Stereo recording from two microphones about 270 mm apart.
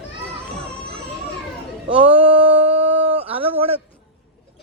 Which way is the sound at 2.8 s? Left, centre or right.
Right.